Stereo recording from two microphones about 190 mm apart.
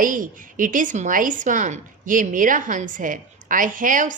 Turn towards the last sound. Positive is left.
turn(degrees=-45)  # may be behind; listen again after turning